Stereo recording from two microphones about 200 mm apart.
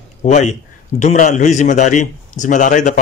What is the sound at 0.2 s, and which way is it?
A man's voice, 35° left (ahead or behind).